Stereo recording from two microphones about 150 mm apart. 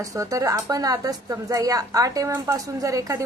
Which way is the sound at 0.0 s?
20° right (ahead or behind).